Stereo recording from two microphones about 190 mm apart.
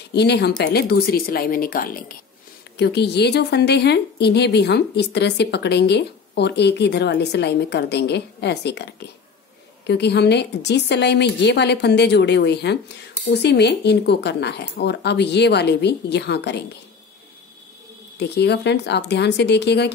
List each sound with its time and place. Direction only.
0.1 s speech: 60° left (ahead or behind)
2.8 s a woman's voice: 60° left (ahead or behind)
18.2 s a woman's voice: 60° left (ahead or behind)